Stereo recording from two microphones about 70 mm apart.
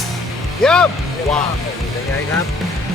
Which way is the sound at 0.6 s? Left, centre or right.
Centre.